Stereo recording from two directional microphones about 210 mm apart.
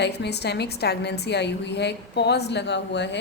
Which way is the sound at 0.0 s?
55° left (ahead or behind).